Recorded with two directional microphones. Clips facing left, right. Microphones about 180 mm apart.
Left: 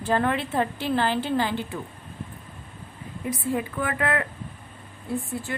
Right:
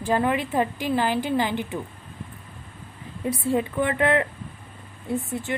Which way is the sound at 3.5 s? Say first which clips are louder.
Right 4 dB; 25° right (ahead or behind).